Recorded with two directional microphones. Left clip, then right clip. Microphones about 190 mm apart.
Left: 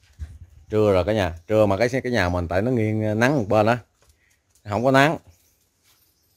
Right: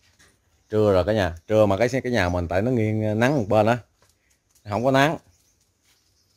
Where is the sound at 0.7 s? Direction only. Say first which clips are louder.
Even; centre (ahead or behind).